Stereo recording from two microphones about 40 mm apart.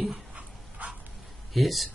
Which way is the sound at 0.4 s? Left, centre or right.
Right.